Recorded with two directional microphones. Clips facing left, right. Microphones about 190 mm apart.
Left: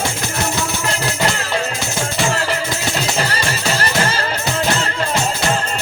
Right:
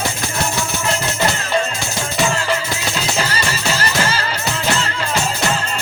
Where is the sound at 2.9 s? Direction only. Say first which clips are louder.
Even; 60° left (ahead or behind).